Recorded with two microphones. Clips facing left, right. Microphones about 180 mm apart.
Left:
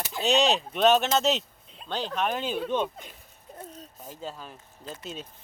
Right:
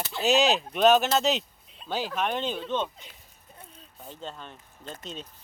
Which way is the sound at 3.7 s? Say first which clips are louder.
Left 5 dB; 40° left (ahead or behind).